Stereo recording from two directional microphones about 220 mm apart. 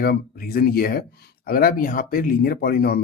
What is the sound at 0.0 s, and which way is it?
A man's voice, 45° left (ahead or behind).